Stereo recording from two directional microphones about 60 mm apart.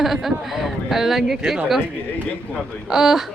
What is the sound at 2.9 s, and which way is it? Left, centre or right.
Speech, centre.